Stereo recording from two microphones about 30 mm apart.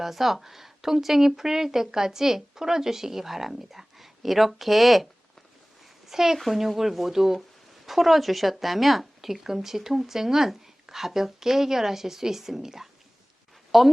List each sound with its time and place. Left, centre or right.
0.0 s speech: centre
6.1 s speech: centre
13.7 s a sound: centre